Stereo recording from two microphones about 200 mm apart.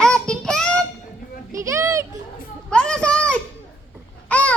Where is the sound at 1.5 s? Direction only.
15° right (ahead or behind).